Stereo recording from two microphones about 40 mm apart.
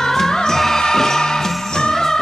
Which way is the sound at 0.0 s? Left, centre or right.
Centre.